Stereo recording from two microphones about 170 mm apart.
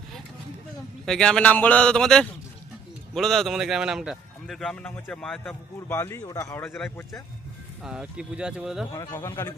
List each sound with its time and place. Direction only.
1.0 s a man's voice: 5° left (ahead or behind)
7.9 s a man's voice: 5° right (ahead or behind)
9.0 s speech: 15° left (ahead or behind)